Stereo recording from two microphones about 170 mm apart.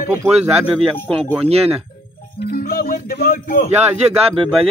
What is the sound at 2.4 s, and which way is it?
Speech, 60° left (ahead or behind).